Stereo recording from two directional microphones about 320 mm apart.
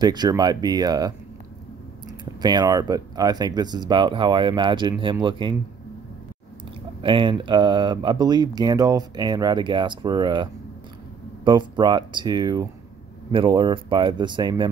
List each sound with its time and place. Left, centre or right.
0.0 s speech: centre
2.4 s speech: centre
7.0 s speech: centre